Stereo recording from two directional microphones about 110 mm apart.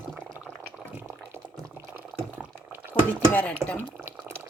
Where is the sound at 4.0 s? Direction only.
20° right (ahead or behind).